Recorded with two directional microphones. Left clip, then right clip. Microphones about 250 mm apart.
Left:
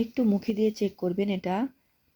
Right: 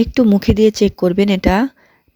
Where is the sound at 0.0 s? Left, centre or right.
Right.